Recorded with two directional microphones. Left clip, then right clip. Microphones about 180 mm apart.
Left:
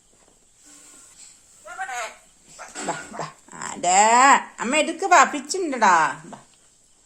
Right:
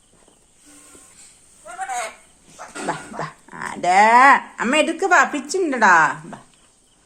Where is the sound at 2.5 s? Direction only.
10° left (ahead or behind).